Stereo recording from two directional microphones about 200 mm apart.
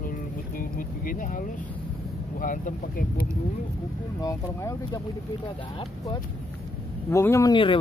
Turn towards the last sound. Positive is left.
turn(degrees=25)  # may be behind; listen again after turning